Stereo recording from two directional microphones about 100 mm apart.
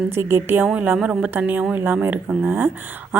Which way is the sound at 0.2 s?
25° right (ahead or behind).